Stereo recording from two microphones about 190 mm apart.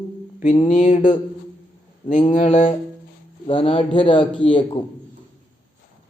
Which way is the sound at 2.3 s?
45° left (ahead or behind).